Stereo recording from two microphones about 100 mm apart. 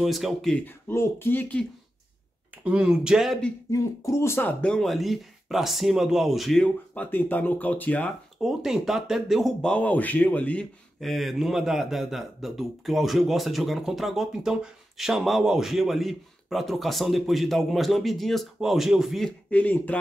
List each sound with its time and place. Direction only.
0.0 s speech: centre (ahead or behind)
0.7 s speech: 25° left (ahead or behind)
2.6 s speech: 10° right (ahead or behind)
3.7 s speech: 30° left (ahead or behind)
4.6 s speech: 5° left (ahead or behind)
6.9 s speech: 15° left (ahead or behind)
8.4 s speech: 5° right (ahead or behind)
19.5 s speech: 15° left (ahead or behind)